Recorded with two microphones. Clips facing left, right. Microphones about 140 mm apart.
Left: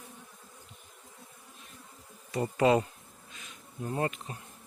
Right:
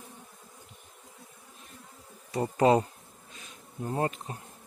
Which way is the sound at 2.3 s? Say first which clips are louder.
Right 2 dB; 35° right (ahead or behind).